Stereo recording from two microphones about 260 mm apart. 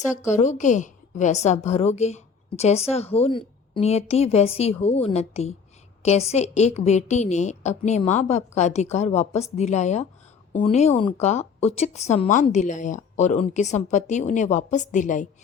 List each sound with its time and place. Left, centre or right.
0.3 s speech: left